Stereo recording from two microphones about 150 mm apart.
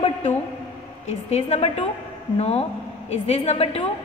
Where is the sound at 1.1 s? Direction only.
45° left (ahead or behind).